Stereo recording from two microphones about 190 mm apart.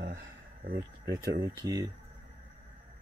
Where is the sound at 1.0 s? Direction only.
20° right (ahead or behind).